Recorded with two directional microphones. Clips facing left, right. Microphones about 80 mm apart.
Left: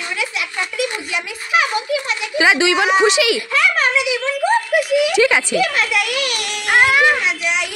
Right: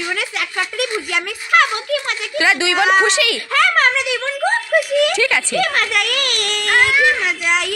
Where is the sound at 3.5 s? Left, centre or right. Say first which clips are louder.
Right 6 dB; right.